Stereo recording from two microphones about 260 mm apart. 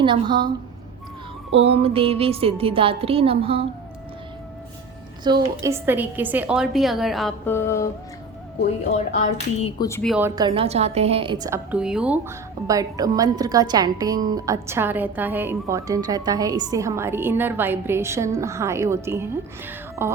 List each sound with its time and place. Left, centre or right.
0.0 s a woman's voice: centre
1.5 s a woman's voice: right
5.2 s a woman's voice: centre
9.8 s speech: centre
10.1 s a woman's voice: centre